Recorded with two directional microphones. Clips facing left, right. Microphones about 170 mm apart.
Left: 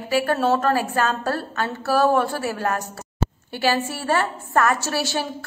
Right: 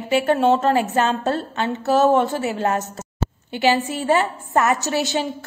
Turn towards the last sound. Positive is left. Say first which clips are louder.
# right 3 dB
turn(degrees=-20)  # may be behind; listen again after turning